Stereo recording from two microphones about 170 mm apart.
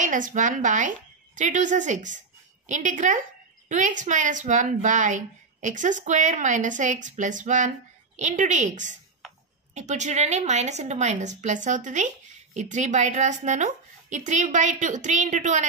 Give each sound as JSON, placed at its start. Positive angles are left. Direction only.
{"t": 0.0, "sound": "speech", "side_deg": -50}